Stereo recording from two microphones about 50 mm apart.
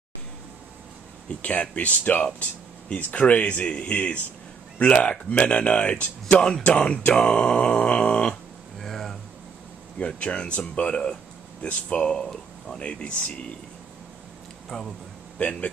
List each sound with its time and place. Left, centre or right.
1.4 s speech: left
8.7 s a sound: centre
9.9 s speech: left
14.7 s speech: centre
15.3 s a man's voice: left